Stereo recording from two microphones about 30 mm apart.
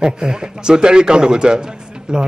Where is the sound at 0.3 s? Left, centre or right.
Right.